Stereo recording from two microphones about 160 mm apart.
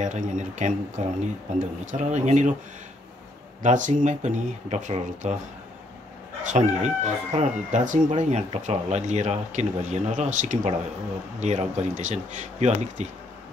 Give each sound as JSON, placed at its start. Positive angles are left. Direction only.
{"t": 0.0, "sound": "speech", "side_deg": -50}
{"t": 3.6, "sound": "speech", "side_deg": -50}
{"t": 6.4, "sound": "speech", "side_deg": -50}